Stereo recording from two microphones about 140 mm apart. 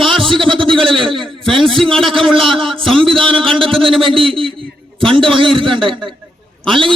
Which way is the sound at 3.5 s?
40° right (ahead or behind).